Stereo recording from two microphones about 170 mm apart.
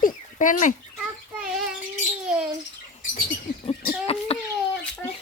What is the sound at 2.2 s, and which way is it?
Bird, 5° right (ahead or behind).